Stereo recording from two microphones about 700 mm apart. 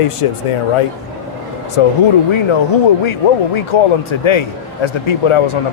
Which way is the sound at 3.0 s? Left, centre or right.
Left.